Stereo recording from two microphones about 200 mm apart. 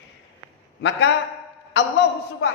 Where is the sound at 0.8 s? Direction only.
60° left (ahead or behind).